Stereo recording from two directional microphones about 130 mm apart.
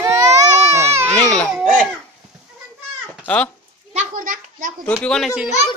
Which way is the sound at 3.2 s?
10° left (ahead or behind).